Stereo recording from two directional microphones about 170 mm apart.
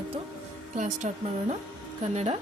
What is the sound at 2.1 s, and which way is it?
Speech, 40° right (ahead or behind).